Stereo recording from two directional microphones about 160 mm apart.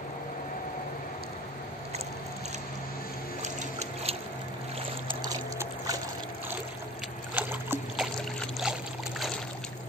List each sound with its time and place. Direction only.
3.4 s a sound: 40° right (ahead or behind)
5.2 s pour: 25° right (ahead or behind)
7.3 s boat: 10° right (ahead or behind)